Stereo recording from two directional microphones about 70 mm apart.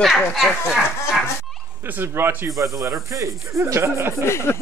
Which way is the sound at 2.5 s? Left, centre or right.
Right.